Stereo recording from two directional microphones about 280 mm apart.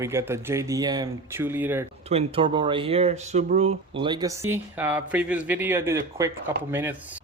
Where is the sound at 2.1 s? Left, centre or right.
Right.